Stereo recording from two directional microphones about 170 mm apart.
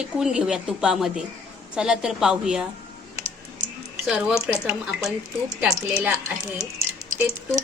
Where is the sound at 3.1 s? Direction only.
20° right (ahead or behind).